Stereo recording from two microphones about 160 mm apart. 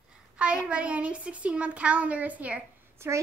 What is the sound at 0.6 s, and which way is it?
A woman's voice, 5° right (ahead or behind).